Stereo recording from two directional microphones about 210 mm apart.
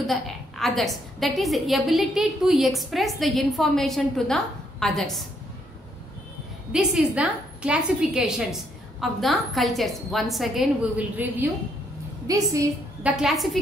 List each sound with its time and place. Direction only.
0.0 s a woman's voice: centre (ahead or behind)
6.7 s a woman's voice: 5° right (ahead or behind)
13.0 s a woman's voice: 5° right (ahead or behind)